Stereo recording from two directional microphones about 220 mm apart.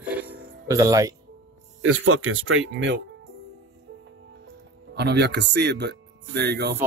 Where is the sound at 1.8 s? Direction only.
70° right (ahead or behind); by 3.0 s 55° right (ahead or behind).